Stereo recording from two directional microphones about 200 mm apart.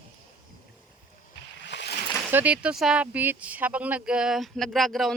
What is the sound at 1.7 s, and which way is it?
Splash, 60° left (ahead or behind).